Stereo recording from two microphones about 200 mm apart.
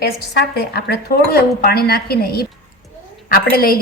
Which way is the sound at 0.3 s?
50° left (ahead or behind).